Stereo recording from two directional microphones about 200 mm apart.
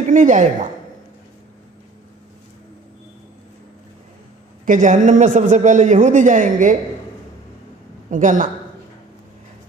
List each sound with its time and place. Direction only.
0.1 s speech: 40° right (ahead or behind)
4.6 s speech: 40° right (ahead or behind)
8.1 s speech: 40° right (ahead or behind)